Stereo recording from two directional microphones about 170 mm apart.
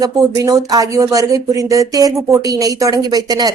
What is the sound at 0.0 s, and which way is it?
Speech, 20° right (ahead or behind).